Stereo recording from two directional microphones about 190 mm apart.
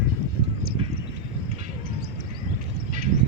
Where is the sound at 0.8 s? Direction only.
30° right (ahead or behind).